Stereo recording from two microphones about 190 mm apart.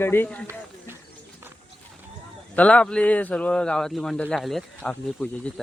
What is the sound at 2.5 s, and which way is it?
Speech, 5° left (ahead or behind).